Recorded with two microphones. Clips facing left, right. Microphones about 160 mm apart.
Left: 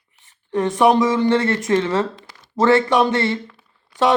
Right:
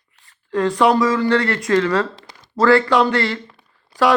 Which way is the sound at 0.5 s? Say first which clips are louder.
Even; 20° left (ahead or behind).